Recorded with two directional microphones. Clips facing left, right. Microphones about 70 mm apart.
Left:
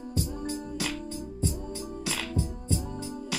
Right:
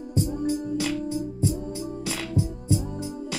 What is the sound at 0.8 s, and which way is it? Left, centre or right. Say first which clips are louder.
Music: right 7 dB; centre.